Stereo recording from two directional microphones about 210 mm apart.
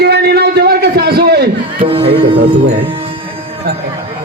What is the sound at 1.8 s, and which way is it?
Speech, 25° right (ahead or behind).